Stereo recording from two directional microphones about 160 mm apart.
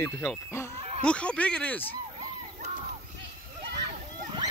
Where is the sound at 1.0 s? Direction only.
5° left (ahead or behind).